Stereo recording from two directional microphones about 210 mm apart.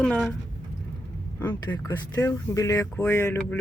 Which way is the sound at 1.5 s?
20° left (ahead or behind).